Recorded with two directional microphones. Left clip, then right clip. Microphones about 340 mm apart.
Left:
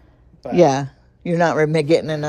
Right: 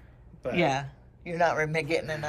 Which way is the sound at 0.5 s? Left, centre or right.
Centre.